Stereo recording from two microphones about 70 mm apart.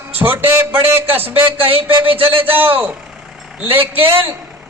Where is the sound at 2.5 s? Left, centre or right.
Right.